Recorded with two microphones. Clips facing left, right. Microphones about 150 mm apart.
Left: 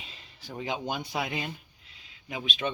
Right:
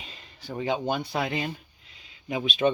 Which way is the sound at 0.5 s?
5° left (ahead or behind).